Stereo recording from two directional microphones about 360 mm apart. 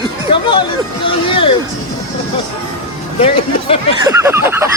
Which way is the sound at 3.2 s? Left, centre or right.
Centre.